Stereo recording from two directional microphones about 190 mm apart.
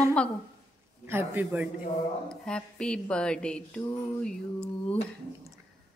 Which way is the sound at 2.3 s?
5° left (ahead or behind).